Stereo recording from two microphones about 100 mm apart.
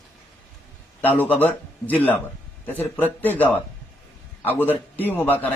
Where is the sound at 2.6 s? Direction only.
20° left (ahead or behind).